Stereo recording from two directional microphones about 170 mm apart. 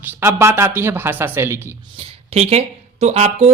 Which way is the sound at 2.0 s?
35° right (ahead or behind).